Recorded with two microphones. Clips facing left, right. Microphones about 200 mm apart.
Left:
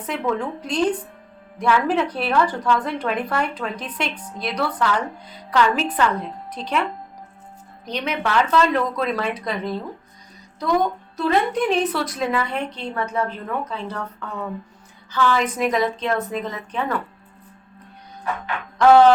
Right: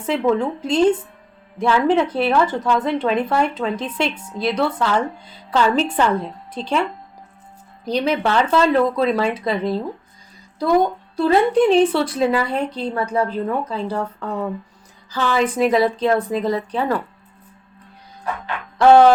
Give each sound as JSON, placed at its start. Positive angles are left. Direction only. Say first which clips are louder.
{"t": 0.0, "sound": "speech", "louder": "right 6 dB", "side_deg": -25}
{"t": 7.9, "sound": "a woman's voice", "louder": "right 6 dB", "side_deg": -35}
{"t": 11.2, "sound": "a woman's voice", "louder": "right 5 dB", "side_deg": -30}
{"t": 18.8, "sound": "a sound", "louder": "right 2 dB", "side_deg": -25}